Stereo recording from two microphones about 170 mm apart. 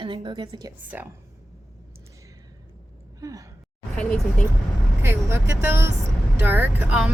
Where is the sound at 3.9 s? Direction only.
5° left (ahead or behind).